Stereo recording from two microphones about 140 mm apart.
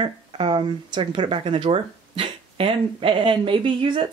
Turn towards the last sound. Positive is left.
turn(degrees=-40)  # may be behind; listen again after turning